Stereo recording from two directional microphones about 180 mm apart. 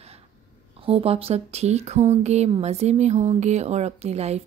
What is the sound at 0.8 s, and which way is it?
Speech, 35° right (ahead or behind).